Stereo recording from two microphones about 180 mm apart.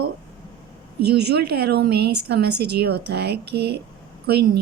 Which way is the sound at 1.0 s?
65° right (ahead or behind).